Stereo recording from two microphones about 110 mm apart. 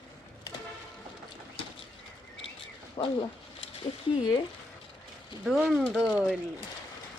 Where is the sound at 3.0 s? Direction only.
45° left (ahead or behind).